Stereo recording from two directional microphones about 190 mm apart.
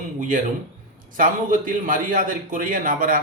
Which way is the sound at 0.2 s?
45° right (ahead or behind).